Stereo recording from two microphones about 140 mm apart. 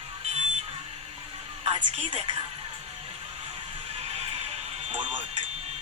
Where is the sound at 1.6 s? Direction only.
40° right (ahead or behind).